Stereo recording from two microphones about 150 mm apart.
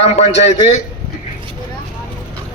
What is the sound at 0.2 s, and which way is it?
Speech, 45° left (ahead or behind).